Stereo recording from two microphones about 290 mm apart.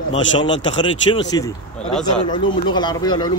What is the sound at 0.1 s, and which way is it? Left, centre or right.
Speech, left.